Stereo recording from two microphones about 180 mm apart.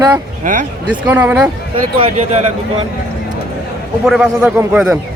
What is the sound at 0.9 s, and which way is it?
Speech, 10° right (ahead or behind).